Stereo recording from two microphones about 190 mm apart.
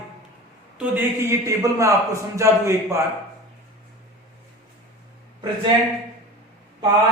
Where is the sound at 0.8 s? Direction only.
10° right (ahead or behind).